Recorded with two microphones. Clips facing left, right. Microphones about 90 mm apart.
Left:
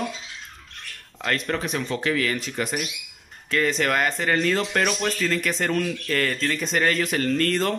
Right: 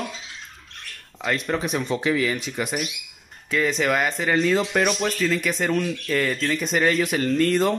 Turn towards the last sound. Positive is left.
turn(degrees=-10)  # may be behind; listen again after turning